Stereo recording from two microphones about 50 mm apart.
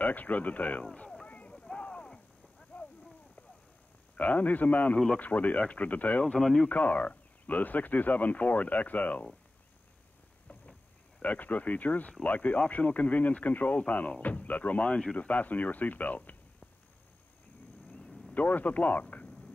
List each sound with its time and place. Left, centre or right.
0.0 s speech: left
1.2 s clip-clop: left
1.5 s a sound: centre
4.2 s speech: left
6.2 s speech: centre
6.7 s speech: left
11.2 s speech: left
15.1 s speech: left
18.3 s speech: left